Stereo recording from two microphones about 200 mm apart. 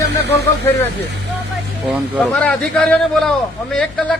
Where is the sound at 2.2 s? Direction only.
5° left (ahead or behind).